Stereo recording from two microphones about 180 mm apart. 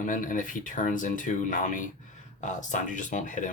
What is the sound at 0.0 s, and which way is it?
Speech, 45° left (ahead or behind).